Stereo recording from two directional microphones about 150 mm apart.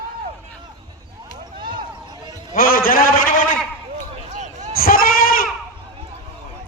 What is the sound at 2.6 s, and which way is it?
Speech, 70° left (ahead or behind).